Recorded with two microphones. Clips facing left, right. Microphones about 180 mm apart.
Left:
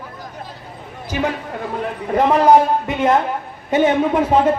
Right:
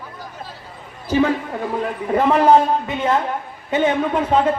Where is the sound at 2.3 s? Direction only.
15° left (ahead or behind).